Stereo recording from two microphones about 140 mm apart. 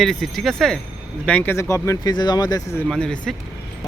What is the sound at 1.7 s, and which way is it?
Speech, 25° left (ahead or behind).